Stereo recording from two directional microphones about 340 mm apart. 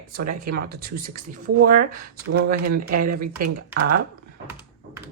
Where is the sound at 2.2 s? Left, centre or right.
Right.